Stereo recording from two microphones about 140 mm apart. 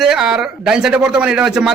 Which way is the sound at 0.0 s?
5° right (ahead or behind).